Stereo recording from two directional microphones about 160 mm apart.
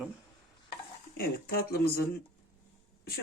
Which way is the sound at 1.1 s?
75° left (ahead or behind).